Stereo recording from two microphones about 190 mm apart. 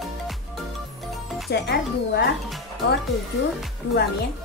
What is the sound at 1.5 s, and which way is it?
Speech, 55° left (ahead or behind).